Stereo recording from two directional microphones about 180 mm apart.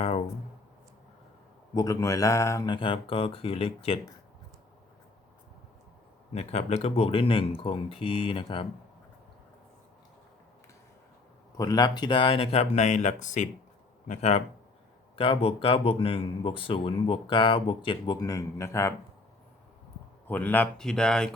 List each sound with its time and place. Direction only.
1.7 s speech: 20° left (ahead or behind)
6.3 s speech: 35° left (ahead or behind)
11.5 s speech: 20° left (ahead or behind)
20.2 s speech: 10° left (ahead or behind)